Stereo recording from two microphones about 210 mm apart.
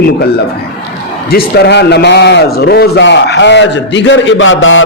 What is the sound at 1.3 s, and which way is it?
A man's voice, 50° left (ahead or behind).